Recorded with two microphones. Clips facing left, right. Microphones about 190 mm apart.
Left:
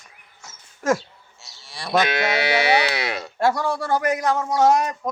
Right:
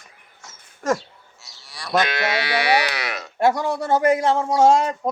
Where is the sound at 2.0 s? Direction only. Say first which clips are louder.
Left 1 dB; 25° left (ahead or behind).